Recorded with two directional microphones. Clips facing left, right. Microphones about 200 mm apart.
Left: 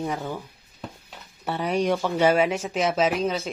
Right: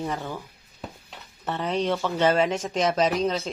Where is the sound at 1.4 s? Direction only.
10° left (ahead or behind).